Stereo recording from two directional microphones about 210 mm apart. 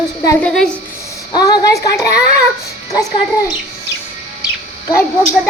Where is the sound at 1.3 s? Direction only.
20° left (ahead or behind).